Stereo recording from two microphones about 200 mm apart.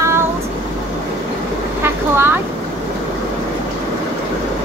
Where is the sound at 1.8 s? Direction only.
10° right (ahead or behind).